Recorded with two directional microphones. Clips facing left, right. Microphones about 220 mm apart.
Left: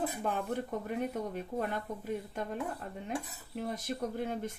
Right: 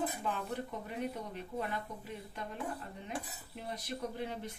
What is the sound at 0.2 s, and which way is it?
Speech, 50° left (ahead or behind).